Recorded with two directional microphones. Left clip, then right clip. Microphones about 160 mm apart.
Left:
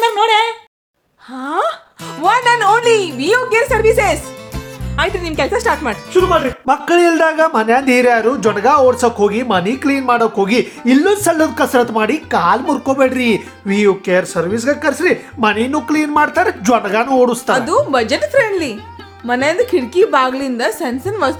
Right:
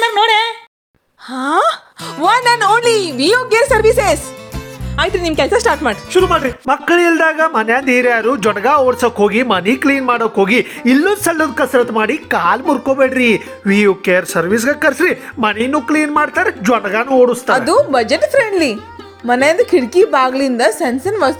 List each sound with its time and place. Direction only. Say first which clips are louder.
0.0 s a sound: even; 20° right (ahead or behind)
1.3 s a sound: right 4 dB; 35° right (ahead or behind)
2.3 s music: even; 35° right (ahead or behind)
2.7 s a man's voice: even; 30° right (ahead or behind)
6.1 s speech: even; 55° right (ahead or behind)
6.7 s a man's voice: even; 25° right (ahead or behind)
11.3 s speech: left 1 dB; 10° right (ahead or behind)
12.3 s speech: left 1 dB; 35° right (ahead or behind)
12.6 s speech: right 1 dB; 15° right (ahead or behind)
13.7 s speech: right 2 dB; 35° right (ahead or behind); by 17.5 s 5° right (ahead or behind)
17.7 s a man's voice: right 3 dB; 25° right (ahead or behind)